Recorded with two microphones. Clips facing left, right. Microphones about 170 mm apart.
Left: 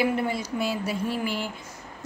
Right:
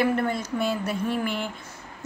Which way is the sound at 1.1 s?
55° right (ahead or behind).